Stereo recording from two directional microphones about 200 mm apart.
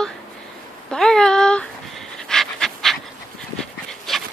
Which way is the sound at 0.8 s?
5° left (ahead or behind).